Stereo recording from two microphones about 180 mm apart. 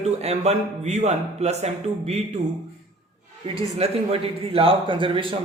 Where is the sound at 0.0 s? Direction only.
35° right (ahead or behind).